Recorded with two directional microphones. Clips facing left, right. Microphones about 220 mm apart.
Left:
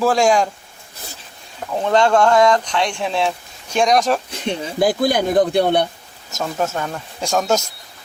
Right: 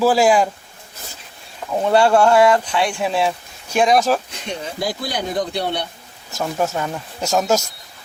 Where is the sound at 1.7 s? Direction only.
10° right (ahead or behind).